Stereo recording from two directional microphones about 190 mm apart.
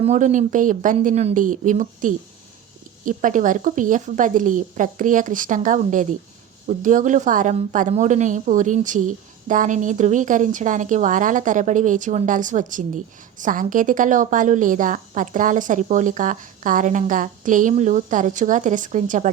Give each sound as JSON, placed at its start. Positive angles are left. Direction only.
{"t": 0.0, "sound": "a woman's voice", "side_deg": -40}